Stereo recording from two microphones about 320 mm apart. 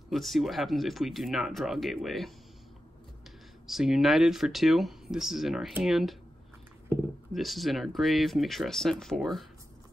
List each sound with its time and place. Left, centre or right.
0.1 s speech: centre
3.6 s speech: centre